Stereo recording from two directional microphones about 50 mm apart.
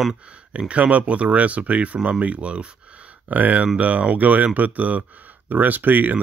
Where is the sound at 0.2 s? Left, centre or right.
Right.